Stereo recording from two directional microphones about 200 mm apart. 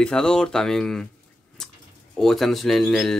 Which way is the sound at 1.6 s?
5° left (ahead or behind).